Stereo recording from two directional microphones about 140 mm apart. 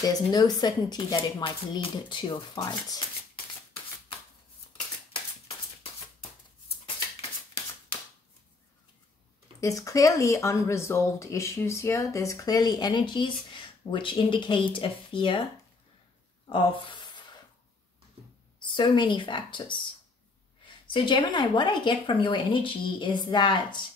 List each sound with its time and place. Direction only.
0.0 s speech: 30° left (ahead or behind)
9.6 s speech: 25° left (ahead or behind)
16.4 s a sound: 40° left (ahead or behind)
18.6 s a woman's voice: 35° left (ahead or behind)
20.9 s a woman's voice: 35° left (ahead or behind)